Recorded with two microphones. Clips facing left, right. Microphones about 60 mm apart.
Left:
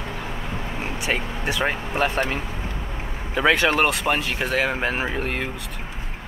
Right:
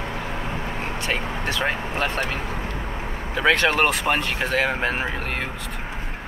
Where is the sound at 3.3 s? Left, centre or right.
Centre.